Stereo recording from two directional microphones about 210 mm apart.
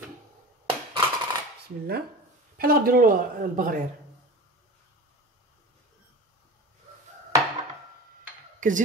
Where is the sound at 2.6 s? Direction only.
45° right (ahead or behind).